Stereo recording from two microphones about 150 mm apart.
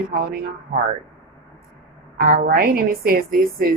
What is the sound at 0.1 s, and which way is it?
Speech, 90° right.